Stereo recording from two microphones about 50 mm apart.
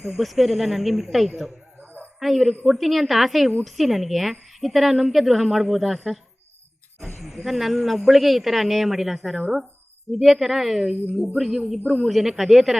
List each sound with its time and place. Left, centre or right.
0.0 s a woman's voice: centre
1.8 s a sound: right
2.1 s a woman's voice: centre